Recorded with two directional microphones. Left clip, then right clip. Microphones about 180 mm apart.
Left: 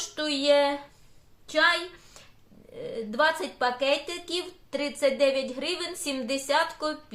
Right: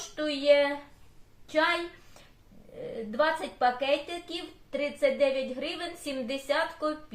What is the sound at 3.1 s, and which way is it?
A woman's voice, 40° left (ahead or behind).